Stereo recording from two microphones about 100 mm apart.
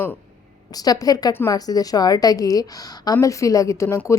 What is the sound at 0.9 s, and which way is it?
A woman's voice, 40° left (ahead or behind).